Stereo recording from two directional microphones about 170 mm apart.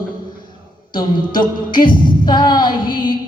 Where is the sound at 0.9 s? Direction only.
25° left (ahead or behind).